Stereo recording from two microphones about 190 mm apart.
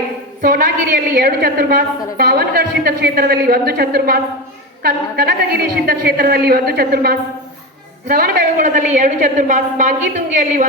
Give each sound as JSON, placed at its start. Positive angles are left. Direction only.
{"t": 0.4, "sound": "a woman's voice", "side_deg": -50}